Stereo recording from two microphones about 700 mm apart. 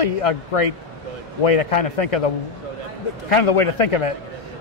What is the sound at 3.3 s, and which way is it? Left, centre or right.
Speech, left.